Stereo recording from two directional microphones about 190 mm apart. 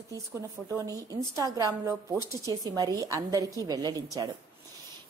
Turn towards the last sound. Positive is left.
turn(degrees=-20)  # may be behind; listen again after turning